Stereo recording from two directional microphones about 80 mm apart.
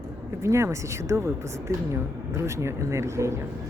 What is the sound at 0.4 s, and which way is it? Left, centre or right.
Speech, right.